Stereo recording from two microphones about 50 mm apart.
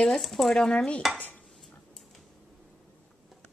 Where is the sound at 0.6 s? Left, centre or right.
Centre.